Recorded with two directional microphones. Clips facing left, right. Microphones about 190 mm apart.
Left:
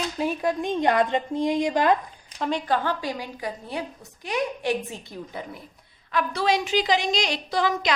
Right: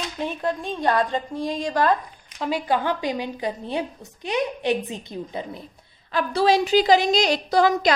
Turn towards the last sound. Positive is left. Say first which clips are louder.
# right 6 dB
turn(degrees=-40)  # may be behind; listen again after turning